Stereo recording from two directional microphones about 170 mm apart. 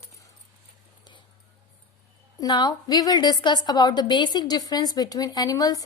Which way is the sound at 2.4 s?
25° left (ahead or behind).